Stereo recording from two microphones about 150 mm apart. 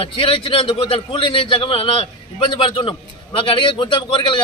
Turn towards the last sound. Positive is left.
turn(degrees=35)  # may be behind; listen again after turning